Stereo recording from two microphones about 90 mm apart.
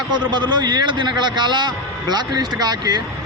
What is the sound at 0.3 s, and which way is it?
A man's voice, 55° right (ahead or behind).